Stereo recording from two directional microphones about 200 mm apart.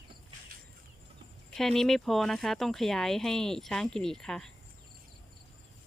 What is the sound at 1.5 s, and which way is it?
Speech, 5° left (ahead or behind).